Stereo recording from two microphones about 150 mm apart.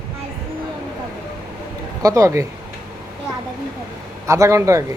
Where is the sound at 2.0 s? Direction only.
20° right (ahead or behind).